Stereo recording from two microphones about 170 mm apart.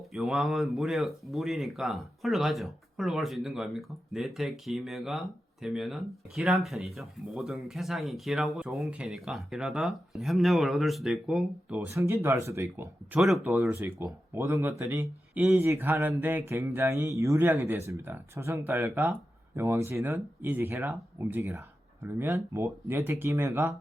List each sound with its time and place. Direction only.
0.1 s speech: centre (ahead or behind)
11.9 s speech: 15° right (ahead or behind)
13.1 s speech: 5° right (ahead or behind)